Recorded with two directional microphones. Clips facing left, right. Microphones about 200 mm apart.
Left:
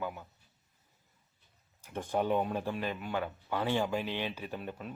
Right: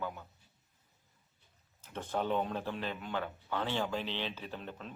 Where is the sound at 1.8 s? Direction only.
15° left (ahead or behind).